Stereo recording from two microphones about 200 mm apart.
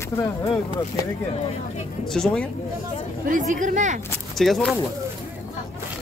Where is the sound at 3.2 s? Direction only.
40° right (ahead or behind).